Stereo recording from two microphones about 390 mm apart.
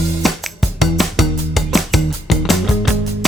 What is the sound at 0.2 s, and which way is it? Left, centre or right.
Music, centre.